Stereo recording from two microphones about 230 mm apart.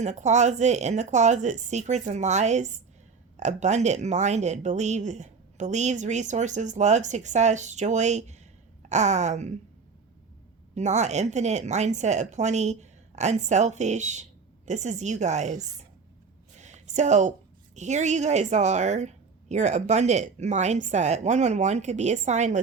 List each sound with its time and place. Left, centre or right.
0.0 s speech: right
10.8 s speech: right
16.6 s a sound: right
17.7 s speech: right